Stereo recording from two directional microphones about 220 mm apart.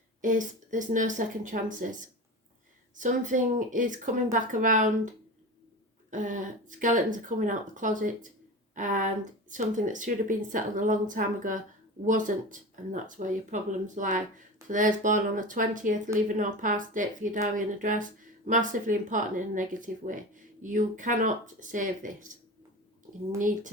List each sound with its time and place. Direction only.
0.2 s speech: 35° right (ahead or behind)
23.4 s speech: 35° right (ahead or behind)